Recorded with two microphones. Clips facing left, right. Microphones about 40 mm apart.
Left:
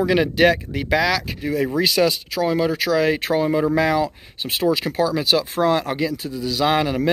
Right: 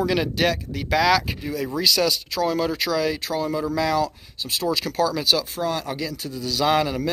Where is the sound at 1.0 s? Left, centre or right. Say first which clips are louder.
Right 2 dB; centre.